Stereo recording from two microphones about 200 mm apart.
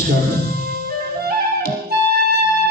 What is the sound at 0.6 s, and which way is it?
Music, 50° right (ahead or behind).